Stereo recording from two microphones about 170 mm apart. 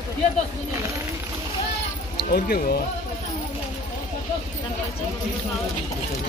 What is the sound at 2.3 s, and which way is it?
Speech, 65° left (ahead or behind).